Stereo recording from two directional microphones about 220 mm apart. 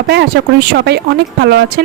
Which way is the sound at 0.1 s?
50° right (ahead or behind).